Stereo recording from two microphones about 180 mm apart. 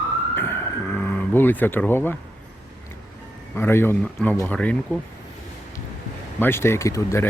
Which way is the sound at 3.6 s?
15° left (ahead or behind).